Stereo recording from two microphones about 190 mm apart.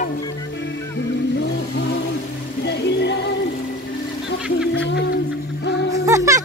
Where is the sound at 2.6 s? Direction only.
65° left (ahead or behind).